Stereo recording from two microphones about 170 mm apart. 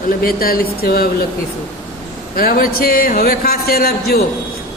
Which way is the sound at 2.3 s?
60° left (ahead or behind).